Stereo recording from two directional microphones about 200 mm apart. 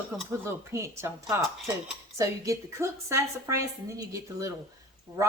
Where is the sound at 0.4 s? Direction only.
15° right (ahead or behind).